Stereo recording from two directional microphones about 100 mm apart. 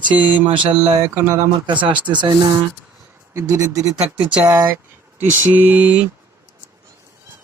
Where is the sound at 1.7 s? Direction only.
55° right (ahead or behind).